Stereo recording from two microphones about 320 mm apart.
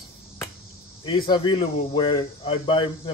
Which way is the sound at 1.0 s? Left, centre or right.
Centre.